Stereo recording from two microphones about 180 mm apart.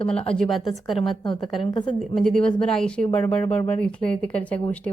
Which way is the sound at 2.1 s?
5° left (ahead or behind).